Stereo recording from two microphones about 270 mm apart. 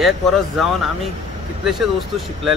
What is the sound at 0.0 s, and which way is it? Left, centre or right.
Speech, centre.